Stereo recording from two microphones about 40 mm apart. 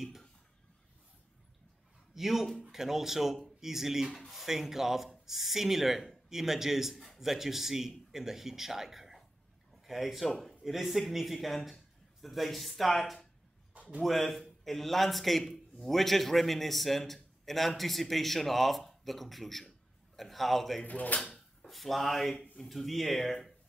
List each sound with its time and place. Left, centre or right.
2.1 s a man's voice: centre
20.8 s speech: left
21.6 s a man's voice: centre